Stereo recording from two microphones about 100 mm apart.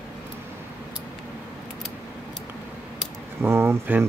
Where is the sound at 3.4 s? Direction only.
25° right (ahead or behind).